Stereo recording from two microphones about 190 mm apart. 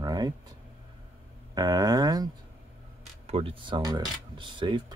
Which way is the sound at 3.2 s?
30° right (ahead or behind).